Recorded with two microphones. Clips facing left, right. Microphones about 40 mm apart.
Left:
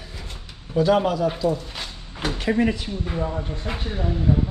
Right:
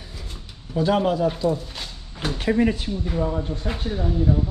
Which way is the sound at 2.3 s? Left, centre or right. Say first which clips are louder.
Right 1 dB; left.